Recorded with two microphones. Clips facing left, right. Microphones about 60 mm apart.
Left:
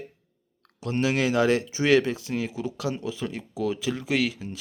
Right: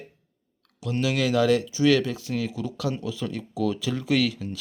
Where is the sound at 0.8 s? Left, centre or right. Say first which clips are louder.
Left 1 dB; left.